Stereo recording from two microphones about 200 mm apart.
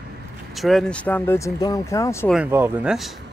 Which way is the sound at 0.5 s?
Centre (ahead or behind).